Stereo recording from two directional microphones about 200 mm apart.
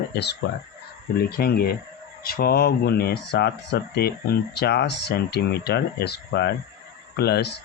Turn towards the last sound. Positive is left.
turn(degrees=55)  # may be behind; listen again after turning